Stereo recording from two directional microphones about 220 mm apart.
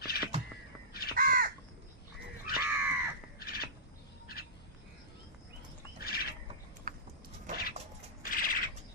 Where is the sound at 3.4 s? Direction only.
45° left (ahead or behind).